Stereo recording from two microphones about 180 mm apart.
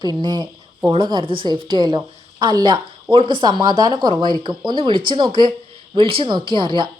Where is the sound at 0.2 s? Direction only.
25° right (ahead or behind).